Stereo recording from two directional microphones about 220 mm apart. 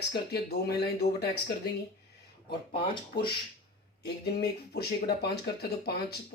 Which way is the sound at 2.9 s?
20° left (ahead or behind).